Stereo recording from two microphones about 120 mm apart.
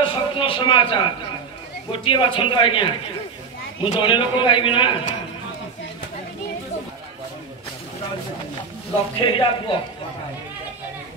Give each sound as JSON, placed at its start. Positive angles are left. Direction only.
{"t": 0.0, "sound": "a sound", "side_deg": 45}
{"t": 1.9, "sound": "a man's voice", "side_deg": 45}
{"t": 9.2, "sound": "a man's voice", "side_deg": 45}